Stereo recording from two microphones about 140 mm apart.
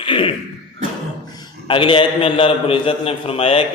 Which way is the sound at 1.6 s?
40° left (ahead or behind).